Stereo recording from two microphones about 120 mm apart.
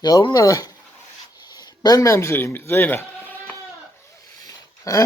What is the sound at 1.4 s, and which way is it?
Bleat, 35° left (ahead or behind).